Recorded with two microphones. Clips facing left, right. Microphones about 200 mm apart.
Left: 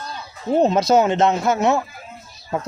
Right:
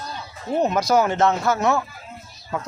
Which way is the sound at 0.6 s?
25° left (ahead or behind).